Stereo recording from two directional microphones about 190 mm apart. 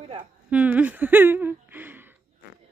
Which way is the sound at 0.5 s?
10° right (ahead or behind).